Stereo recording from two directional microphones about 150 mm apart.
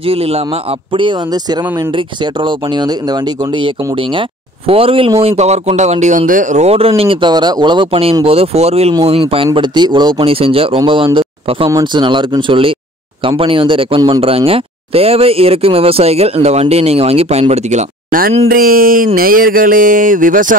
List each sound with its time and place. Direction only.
0.0 s speech: 40° right (ahead or behind)
18.5 s speech: 75° right (ahead or behind)